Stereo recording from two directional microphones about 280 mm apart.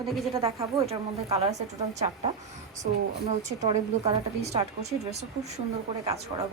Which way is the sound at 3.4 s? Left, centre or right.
Right.